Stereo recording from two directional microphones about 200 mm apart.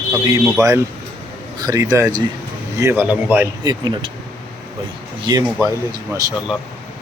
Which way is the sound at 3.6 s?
20° right (ahead or behind).